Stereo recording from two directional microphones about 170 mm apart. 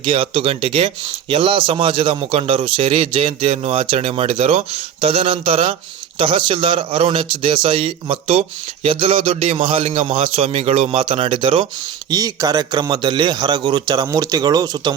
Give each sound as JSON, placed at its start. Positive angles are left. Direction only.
{"t": 0.0, "sound": "a man's voice", "side_deg": -30}